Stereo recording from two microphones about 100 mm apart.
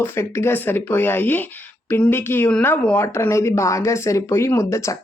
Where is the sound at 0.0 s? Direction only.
25° left (ahead or behind).